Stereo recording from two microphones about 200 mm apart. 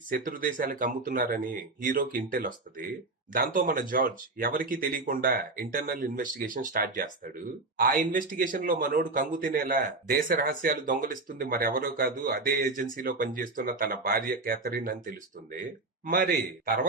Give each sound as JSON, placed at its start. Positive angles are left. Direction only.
{"t": 0.1, "sound": "a man's voice", "side_deg": -45}